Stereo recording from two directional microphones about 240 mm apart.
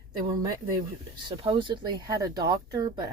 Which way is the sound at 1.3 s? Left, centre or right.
Right.